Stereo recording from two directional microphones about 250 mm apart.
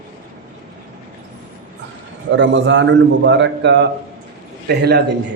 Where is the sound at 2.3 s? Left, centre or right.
Right.